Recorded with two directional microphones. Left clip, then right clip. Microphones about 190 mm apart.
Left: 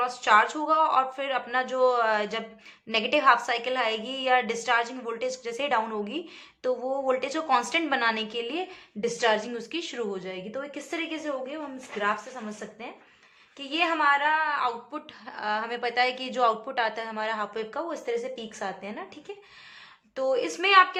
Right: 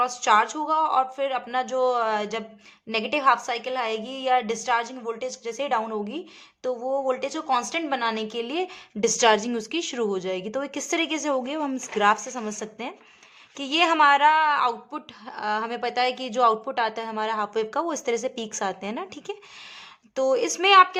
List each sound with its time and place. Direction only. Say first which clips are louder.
0.0 s a woman's voice: right 1 dB; 35° right (ahead or behind)